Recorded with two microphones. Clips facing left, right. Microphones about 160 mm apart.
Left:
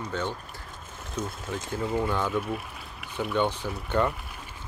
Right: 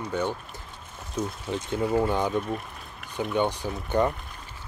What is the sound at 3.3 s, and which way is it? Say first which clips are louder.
Speech: right 1 dB; 15° right (ahead or behind).